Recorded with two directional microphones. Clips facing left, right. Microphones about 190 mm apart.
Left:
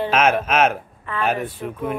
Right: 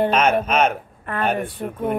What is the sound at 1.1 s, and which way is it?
Speech, 55° right (ahead or behind).